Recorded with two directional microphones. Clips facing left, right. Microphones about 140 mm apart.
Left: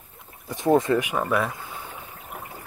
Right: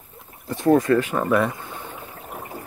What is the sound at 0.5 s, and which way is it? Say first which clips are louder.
Speech: right 3 dB; 15° left (ahead or behind).